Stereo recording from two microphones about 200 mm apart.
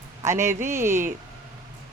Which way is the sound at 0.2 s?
15° right (ahead or behind).